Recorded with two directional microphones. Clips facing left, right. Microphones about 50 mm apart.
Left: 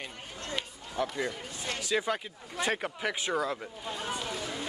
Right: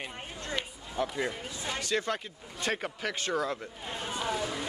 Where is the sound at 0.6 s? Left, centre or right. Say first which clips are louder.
Even; centre.